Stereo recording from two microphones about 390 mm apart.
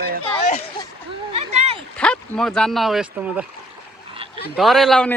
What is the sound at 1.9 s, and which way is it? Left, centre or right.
Speech, centre.